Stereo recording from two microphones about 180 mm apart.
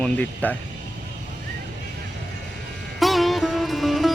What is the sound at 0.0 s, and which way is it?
Speech, 10° left (ahead or behind).